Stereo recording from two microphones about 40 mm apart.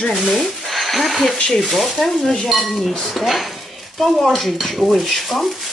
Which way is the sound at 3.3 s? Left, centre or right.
Centre.